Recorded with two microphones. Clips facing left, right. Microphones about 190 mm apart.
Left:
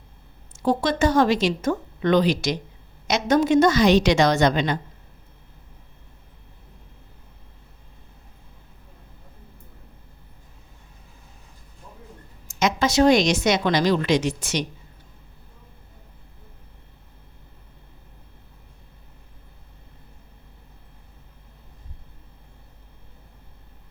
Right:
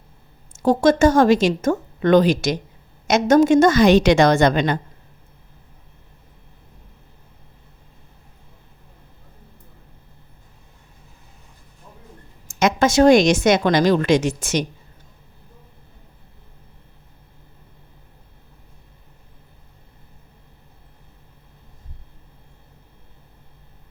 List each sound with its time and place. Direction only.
0.5 s a woman's voice: 45° right (ahead or behind)
12.5 s a woman's voice: 50° right (ahead or behind)